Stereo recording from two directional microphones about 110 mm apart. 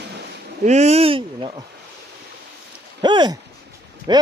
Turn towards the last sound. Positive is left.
turn(degrees=-45)  # may be behind; listen again after turning